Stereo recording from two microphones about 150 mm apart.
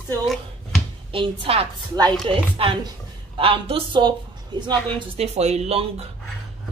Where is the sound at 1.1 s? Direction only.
40° right (ahead or behind).